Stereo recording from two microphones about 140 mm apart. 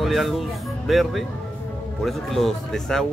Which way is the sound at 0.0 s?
Centre (ahead or behind).